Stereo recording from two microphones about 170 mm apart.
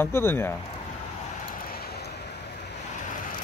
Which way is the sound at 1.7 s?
65° left (ahead or behind).